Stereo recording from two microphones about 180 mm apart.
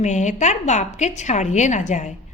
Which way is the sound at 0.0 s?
40° left (ahead or behind).